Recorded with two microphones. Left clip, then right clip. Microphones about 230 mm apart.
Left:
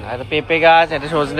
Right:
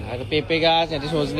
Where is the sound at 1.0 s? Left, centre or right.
Centre.